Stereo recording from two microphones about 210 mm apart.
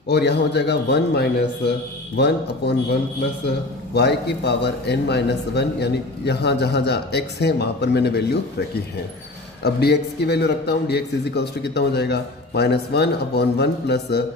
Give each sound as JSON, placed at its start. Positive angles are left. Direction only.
{"t": 0.1, "sound": "a man's voice", "side_deg": 55}
{"t": 3.9, "sound": "a man's voice", "side_deg": 50}
{"t": 9.6, "sound": "a man's voice", "side_deg": 50}